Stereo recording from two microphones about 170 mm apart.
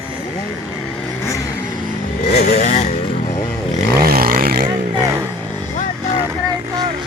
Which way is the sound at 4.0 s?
60° right (ahead or behind).